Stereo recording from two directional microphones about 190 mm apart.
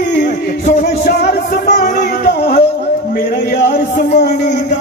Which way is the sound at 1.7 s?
40° left (ahead or behind).